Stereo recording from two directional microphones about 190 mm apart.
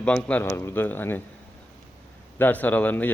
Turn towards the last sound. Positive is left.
turn(degrees=10)  # may be behind; listen again after turning